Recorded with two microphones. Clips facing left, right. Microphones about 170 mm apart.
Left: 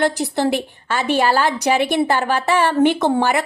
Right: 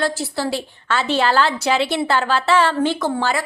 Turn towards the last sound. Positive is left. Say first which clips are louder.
# left 4 dB
turn(degrees=20)  # may be behind; listen again after turning